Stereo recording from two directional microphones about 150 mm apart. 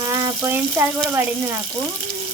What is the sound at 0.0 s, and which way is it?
Water tap, 25° right (ahead or behind).